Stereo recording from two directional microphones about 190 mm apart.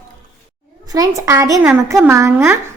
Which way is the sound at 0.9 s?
15° right (ahead or behind).